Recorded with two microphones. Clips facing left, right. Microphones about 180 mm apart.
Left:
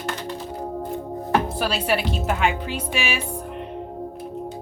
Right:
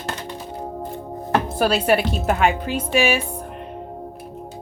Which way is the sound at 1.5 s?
45° right (ahead or behind).